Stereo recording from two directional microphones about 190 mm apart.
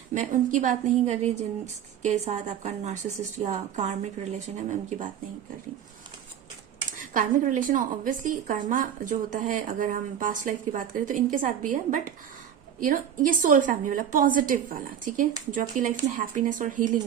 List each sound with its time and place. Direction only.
0.1 s a woman's voice: 40° right (ahead or behind)
6.9 s a woman's voice: 45° right (ahead or behind)